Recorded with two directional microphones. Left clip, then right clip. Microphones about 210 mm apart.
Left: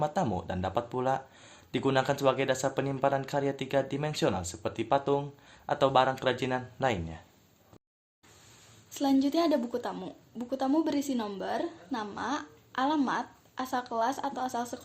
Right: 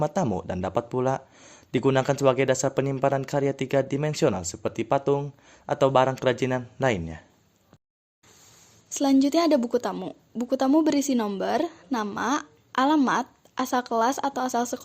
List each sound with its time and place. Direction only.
0.0 s speech: 35° right (ahead or behind)
8.9 s speech: 45° right (ahead or behind)